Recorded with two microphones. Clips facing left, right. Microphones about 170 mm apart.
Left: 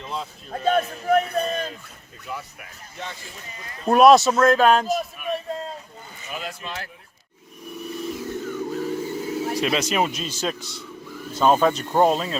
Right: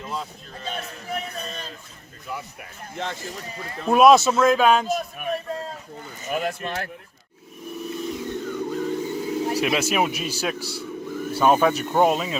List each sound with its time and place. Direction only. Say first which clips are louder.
0.0 s a man's voice: even; centre (ahead or behind)
0.6 s a man's voice: left 12 dB; 55° left (ahead or behind)
3.0 s speech: right 5 dB; 50° right (ahead or behind)
3.8 s a man's voice: left 1 dB; centre (ahead or behind)
6.2 s speech: right 7 dB; 55° right (ahead or behind)
7.8 s vehicle: right 1 dB; centre (ahead or behind)
9.5 s speech: even; 10° right (ahead or behind)
10.6 s speech: right 6 dB; 30° right (ahead or behind)
11.3 s a man's voice: even; 15° right (ahead or behind)